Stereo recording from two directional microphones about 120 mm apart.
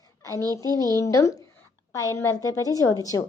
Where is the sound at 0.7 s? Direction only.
25° left (ahead or behind).